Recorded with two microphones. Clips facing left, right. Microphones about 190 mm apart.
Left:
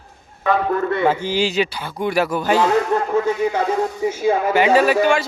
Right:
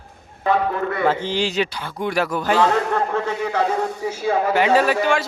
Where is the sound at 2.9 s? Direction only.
15° left (ahead or behind).